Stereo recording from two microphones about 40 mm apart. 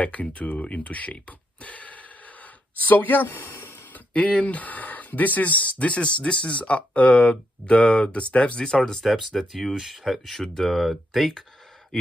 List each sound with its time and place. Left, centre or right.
0.0 s speech: left
2.7 s speech: left
3.3 s a sound: left
3.9 s speech: left; by 9.0 s centre
9.0 s speech: centre